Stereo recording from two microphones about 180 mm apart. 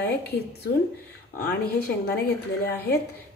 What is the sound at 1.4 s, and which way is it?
Speech, 60° left (ahead or behind).